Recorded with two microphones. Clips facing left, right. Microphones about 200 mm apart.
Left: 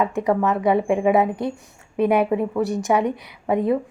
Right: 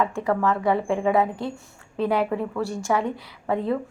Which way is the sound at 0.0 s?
20° left (ahead or behind).